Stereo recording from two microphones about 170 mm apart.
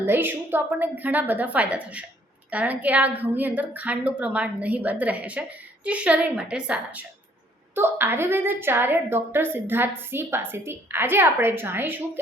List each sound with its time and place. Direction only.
0.0 s a woman's voice: 15° right (ahead or behind)